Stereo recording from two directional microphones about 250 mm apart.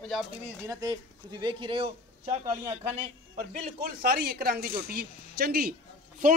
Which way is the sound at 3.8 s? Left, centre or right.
Right.